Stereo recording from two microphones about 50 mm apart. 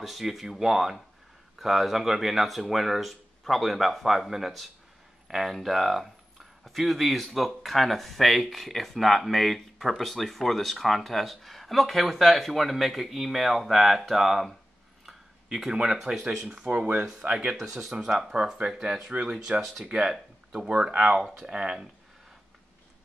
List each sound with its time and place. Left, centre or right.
0.0 s speech: centre
15.5 s speech: centre
17.6 s speech: centre